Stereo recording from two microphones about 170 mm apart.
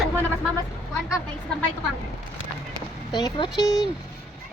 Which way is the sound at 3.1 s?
25° left (ahead or behind).